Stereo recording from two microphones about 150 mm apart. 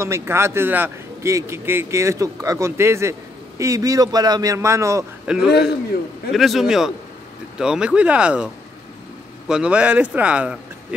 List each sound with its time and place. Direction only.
0.0 s a man's voice: 15° right (ahead or behind)
5.2 s a man's voice: 5° right (ahead or behind)
9.5 s a man's voice: 5° right (ahead or behind)